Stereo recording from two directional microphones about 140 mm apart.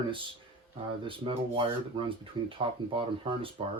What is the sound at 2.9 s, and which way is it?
Speech, 40° right (ahead or behind).